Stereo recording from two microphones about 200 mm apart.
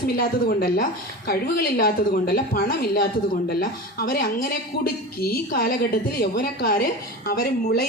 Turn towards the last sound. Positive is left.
turn(degrees=50)  # may be behind; listen again after turning